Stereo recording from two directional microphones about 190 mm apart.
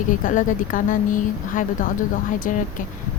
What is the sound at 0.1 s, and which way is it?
A woman's voice, 45° left (ahead or behind).